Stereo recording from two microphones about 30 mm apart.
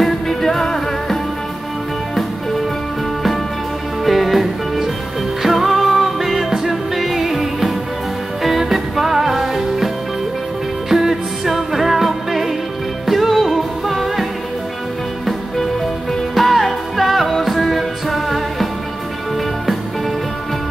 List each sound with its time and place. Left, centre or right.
0.0 s music: centre
4.0 s music: centre
10.9 s music: centre
16.3 s music: centre